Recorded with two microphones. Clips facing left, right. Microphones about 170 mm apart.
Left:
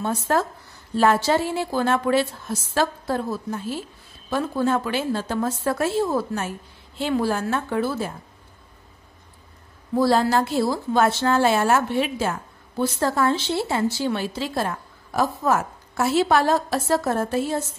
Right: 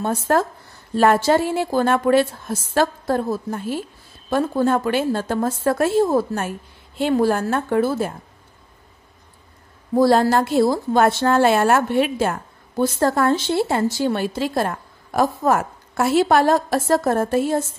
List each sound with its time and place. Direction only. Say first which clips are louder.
0.0 s a woman's voice: right 3 dB; 50° right (ahead or behind)
9.9 s a woman's voice: right 4 dB; 45° right (ahead or behind)